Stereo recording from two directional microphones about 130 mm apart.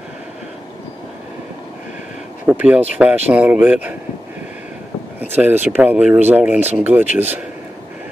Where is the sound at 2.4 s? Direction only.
10° right (ahead or behind).